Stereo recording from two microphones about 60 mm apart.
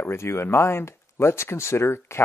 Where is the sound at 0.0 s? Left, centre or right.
Left.